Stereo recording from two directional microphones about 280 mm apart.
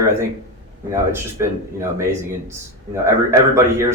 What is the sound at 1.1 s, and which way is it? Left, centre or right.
Speech, centre.